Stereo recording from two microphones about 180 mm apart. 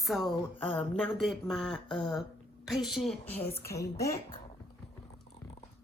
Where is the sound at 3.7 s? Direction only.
15° left (ahead or behind).